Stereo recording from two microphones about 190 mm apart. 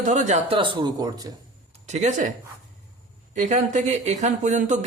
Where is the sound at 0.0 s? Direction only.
40° right (ahead or behind); by 1.3 s 20° right (ahead or behind).